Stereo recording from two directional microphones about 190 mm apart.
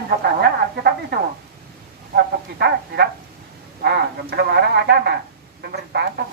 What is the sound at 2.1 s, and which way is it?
Speech, 55° right (ahead or behind).